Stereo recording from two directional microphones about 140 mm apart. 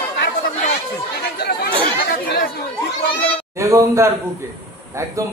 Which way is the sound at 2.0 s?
90° left.